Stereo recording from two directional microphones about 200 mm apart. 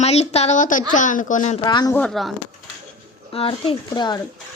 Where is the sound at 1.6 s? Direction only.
20° left (ahead or behind).